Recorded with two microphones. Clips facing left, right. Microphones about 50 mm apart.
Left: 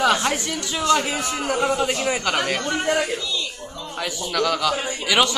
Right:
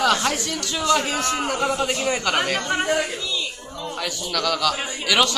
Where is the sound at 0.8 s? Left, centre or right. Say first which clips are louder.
Even; centre.